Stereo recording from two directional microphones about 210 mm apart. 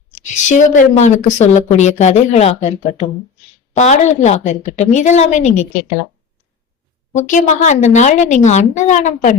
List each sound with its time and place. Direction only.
0.1 s a woman's voice: 35° left (ahead or behind)
7.2 s a woman's voice: 35° left (ahead or behind)